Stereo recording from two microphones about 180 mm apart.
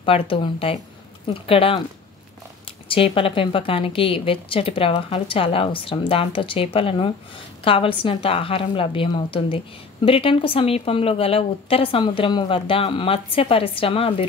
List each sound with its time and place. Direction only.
0.0 s a woman's voice: 30° left (ahead or behind)
2.9 s a woman's voice: 30° left (ahead or behind)